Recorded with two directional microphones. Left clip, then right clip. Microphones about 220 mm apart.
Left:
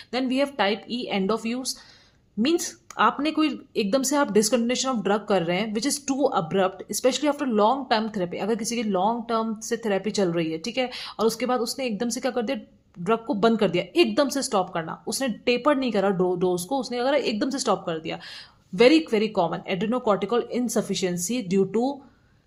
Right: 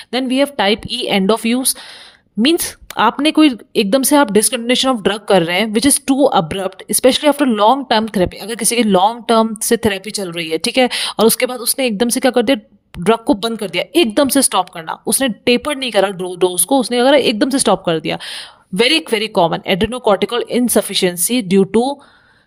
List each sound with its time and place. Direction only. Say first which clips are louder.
0.1 s speech: right 9 dB; 45° right (ahead or behind)